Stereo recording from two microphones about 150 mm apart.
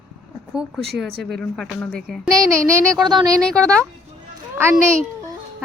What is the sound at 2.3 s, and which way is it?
Speech, 20° right (ahead or behind).